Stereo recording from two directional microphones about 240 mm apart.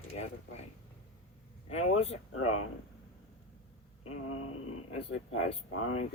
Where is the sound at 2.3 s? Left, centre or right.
Left.